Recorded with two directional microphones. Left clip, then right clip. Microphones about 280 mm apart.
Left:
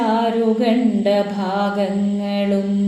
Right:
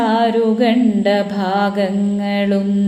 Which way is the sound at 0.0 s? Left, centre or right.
Right.